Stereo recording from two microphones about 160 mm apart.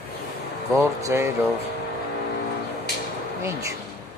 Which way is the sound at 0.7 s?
20° right (ahead or behind).